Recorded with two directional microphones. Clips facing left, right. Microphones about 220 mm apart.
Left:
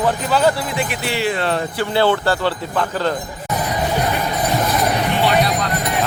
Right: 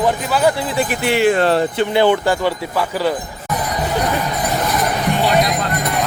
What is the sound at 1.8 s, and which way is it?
Speech, 15° right (ahead or behind).